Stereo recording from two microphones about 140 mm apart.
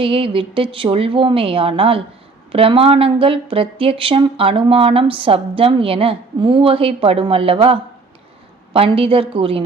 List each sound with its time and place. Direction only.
0.0 s speech: 40° right (ahead or behind)